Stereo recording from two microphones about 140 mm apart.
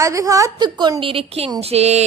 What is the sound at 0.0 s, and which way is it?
A woman's voice, 25° right (ahead or behind).